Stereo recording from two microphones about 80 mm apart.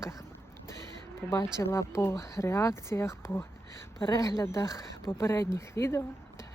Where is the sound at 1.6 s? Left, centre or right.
Left.